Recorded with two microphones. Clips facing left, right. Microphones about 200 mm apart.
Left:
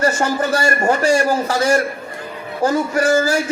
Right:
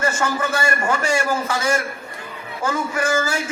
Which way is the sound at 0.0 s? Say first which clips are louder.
Left 4 dB; 40° left (ahead or behind).